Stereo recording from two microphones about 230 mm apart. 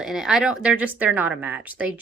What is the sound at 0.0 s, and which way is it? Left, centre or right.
Speech, centre.